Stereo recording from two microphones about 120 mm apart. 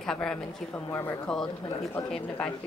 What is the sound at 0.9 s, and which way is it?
Speech, 25° left (ahead or behind).